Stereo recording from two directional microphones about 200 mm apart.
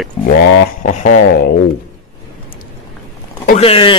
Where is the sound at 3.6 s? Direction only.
25° left (ahead or behind).